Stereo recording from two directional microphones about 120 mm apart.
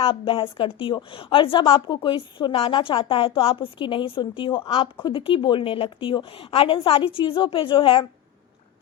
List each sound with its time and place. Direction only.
0.0 s a woman's voice: 50° left (ahead or behind)